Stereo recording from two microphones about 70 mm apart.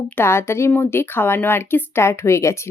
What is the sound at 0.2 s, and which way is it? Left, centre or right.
Speech, left.